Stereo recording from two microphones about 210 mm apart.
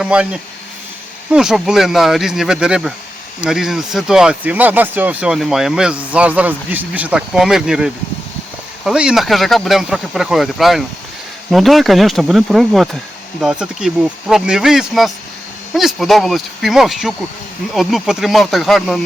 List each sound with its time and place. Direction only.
0.0 s speech: 5° right (ahead or behind)
1.3 s speech: 5° right (ahead or behind)